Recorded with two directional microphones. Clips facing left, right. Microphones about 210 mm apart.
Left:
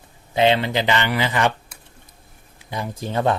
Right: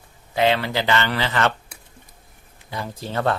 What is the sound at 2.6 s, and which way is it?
Speech, 15° left (ahead or behind).